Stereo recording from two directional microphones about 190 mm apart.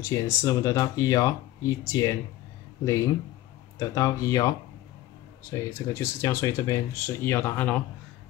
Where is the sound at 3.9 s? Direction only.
15° left (ahead or behind).